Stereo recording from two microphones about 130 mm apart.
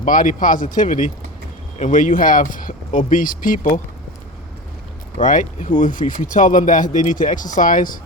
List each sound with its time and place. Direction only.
0.0 s speech: 90° left
1.8 s speech: 75° left (ahead or behind)
5.1 s speech: 75° left (ahead or behind)